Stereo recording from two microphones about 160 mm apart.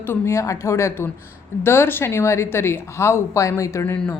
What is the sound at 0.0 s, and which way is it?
A woman's voice, 15° left (ahead or behind).